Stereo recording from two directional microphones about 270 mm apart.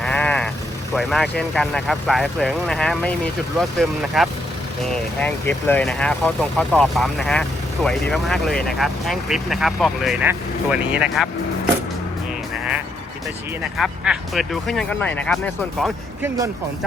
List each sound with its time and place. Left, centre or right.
0.0 s sheep: centre
0.9 s speech: centre
13.7 s speech: centre
15.8 s speech: centre